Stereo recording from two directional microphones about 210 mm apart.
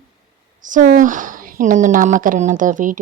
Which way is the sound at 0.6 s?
40° right (ahead or behind).